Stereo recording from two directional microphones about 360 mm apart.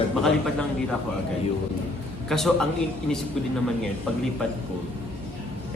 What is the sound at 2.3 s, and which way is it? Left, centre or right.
Speech, centre.